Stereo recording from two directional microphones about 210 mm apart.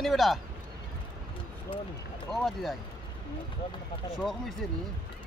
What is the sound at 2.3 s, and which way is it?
Speech, centre (ahead or behind).